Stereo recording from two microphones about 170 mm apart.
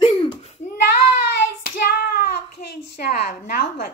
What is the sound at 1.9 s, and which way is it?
Babbling, 65° left (ahead or behind).